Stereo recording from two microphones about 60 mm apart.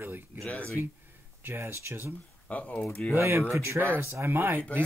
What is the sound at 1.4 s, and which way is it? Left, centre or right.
Speech, right.